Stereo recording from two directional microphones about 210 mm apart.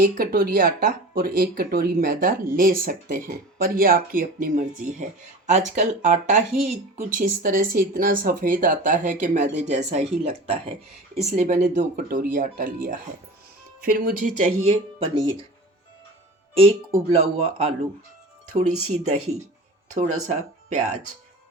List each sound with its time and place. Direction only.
0.0 s speech: 45° right (ahead or behind); by 15.3 s 25° right (ahead or behind)
16.6 s speech: 25° right (ahead or behind)
19.9 s speech: 35° right (ahead or behind)